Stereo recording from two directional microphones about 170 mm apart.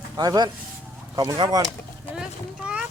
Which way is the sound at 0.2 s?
25° right (ahead or behind).